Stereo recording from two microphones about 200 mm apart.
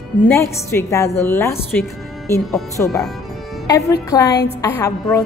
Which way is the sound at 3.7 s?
15° left (ahead or behind).